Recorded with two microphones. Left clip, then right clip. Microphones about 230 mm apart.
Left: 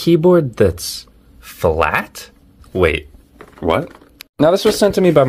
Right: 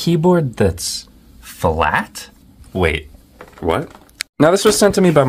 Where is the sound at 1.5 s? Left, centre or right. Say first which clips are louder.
Left 1 dB; centre.